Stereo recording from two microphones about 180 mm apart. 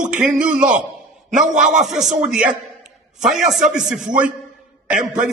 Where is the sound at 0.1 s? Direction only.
5° right (ahead or behind).